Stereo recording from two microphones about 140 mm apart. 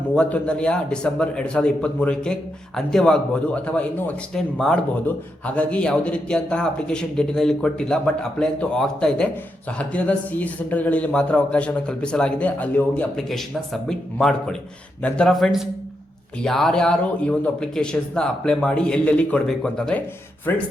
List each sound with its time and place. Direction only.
0.1 s a man's voice: 10° left (ahead or behind)